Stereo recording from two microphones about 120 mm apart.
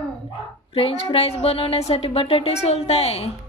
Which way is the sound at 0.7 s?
50° left (ahead or behind).